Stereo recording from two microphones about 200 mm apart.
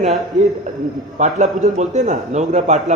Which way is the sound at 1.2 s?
35° right (ahead or behind).